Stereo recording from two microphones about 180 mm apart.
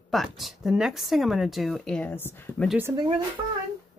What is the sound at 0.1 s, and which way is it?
Speech, centre (ahead or behind).